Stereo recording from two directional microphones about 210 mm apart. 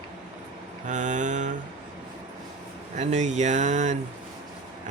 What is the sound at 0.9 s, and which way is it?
Mantra, 35° right (ahead or behind).